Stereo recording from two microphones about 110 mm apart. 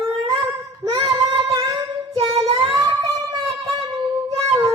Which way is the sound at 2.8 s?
40° right (ahead or behind).